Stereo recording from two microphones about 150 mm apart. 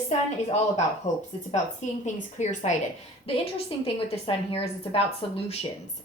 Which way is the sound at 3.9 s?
40° left (ahead or behind).